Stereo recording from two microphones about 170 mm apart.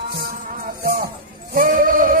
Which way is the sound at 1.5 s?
55° right (ahead or behind).